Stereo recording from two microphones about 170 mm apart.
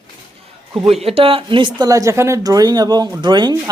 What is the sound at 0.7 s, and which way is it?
A woman's voice, 35° right (ahead or behind).